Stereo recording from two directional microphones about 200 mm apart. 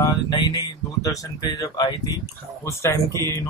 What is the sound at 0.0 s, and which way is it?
Speech, 20° left (ahead or behind).